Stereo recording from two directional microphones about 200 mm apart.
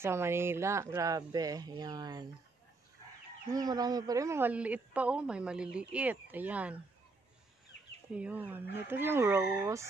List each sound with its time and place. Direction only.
0.0 s a woman's voice: 10° right (ahead or behind)
3.5 s a woman's voice: 20° right (ahead or behind)
8.1 s a woman's voice: 5° right (ahead or behind)